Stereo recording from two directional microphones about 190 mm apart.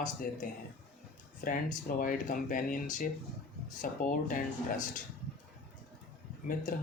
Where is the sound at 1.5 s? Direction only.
45° left (ahead or behind).